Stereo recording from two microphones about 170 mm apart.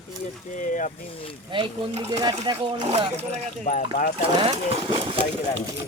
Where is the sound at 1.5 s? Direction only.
30° right (ahead or behind).